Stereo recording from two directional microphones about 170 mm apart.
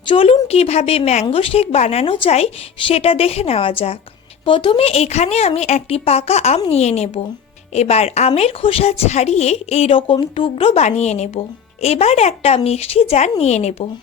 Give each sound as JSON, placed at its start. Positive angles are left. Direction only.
{"t": 0.1, "sound": "speech", "side_deg": 35}